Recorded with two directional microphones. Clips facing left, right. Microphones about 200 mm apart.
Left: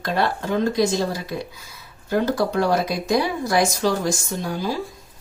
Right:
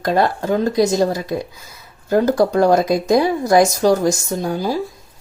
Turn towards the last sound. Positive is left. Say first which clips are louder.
# right 5 dB
turn(degrees=-45)  # may be behind; listen again after turning